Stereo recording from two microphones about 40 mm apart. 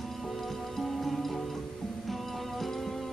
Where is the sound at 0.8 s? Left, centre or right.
Centre.